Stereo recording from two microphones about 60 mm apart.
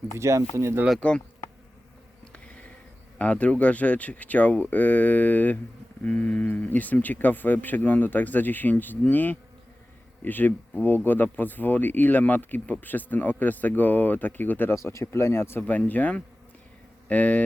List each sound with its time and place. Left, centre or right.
0.2 s speech: right
0.9 s speech: centre
2.3 s bee: left
3.2 s speech: left
14.8 s speech: left
15.6 s speech: left